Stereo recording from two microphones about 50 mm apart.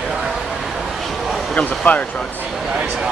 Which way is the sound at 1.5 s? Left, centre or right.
Left.